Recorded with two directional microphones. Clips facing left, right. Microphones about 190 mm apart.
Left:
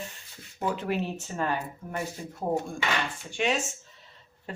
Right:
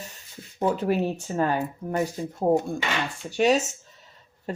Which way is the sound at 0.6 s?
40° right (ahead or behind).